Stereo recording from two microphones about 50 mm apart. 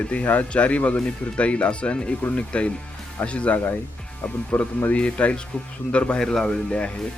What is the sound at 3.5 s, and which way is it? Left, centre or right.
Speech, left.